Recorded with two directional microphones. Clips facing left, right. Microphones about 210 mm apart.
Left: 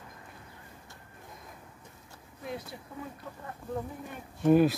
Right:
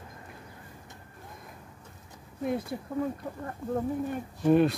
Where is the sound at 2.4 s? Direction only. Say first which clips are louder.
Right 9 dB; 50° right (ahead or behind).